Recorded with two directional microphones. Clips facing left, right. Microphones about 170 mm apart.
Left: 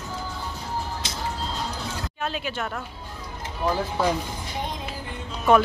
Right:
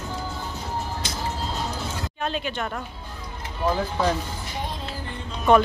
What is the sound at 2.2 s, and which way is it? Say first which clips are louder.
Speech: right 2 dB; 5° left (ahead or behind).